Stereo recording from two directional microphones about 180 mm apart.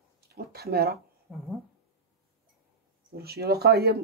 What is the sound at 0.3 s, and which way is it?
Speech, 60° right (ahead or behind).